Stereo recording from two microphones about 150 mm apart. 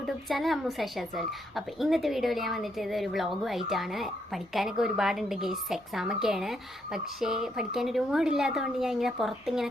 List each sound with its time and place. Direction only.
0.0 s a woman's voice: centre (ahead or behind)